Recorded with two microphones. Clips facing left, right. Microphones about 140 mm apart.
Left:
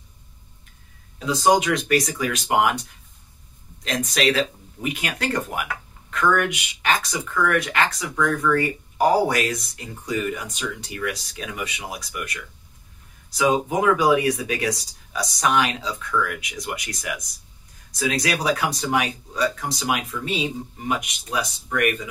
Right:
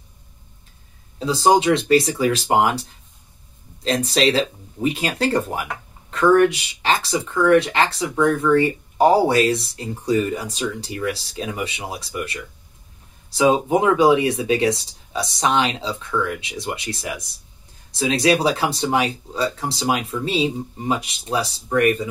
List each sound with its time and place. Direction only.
1.2 s speech: 30° right (ahead or behind)